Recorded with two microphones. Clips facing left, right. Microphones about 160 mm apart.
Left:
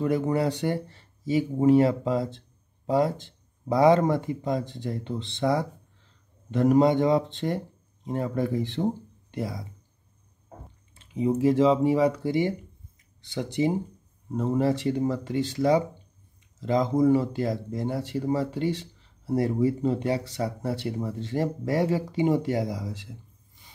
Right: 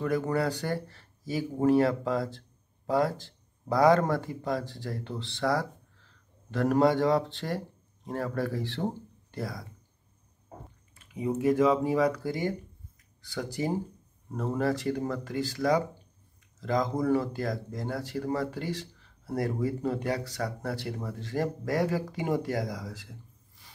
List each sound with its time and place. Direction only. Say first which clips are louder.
0.0 s speech: left 3 dB; 20° left (ahead or behind)
11.0 s speech: left 6 dB; 25° left (ahead or behind)